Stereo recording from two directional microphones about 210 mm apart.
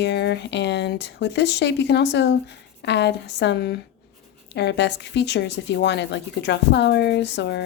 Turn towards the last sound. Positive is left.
turn(degrees=55)  # may be behind; listen again after turning